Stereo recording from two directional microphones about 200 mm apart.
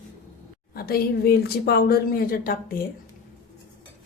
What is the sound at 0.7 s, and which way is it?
Speech, 50° left (ahead or behind).